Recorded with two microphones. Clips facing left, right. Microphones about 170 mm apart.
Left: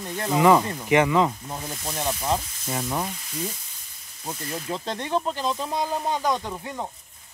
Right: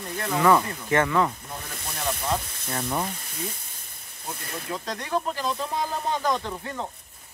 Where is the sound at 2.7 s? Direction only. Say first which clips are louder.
Left 1 dB; 5° left (ahead or behind).